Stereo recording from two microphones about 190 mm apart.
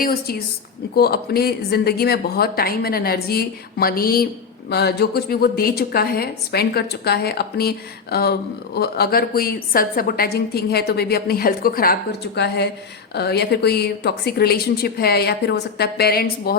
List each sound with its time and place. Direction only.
0.0 s a woman's voice: 55° left (ahead or behind)